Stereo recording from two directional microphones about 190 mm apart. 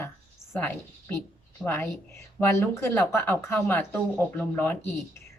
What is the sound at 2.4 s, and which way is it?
A woman's voice, 10° left (ahead or behind).